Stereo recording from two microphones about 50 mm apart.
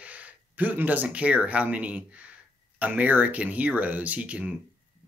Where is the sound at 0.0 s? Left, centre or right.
Right.